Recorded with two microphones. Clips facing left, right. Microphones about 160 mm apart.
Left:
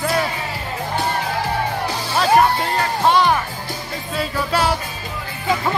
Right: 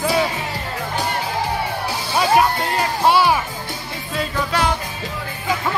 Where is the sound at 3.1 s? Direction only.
5° right (ahead or behind).